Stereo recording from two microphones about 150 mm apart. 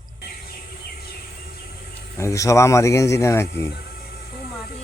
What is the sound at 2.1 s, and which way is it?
Speech, 20° left (ahead or behind).